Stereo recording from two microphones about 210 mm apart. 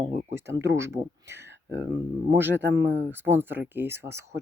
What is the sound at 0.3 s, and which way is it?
Speech, 10° right (ahead or behind).